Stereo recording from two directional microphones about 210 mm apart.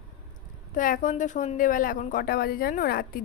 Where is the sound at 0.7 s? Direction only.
40° left (ahead or behind).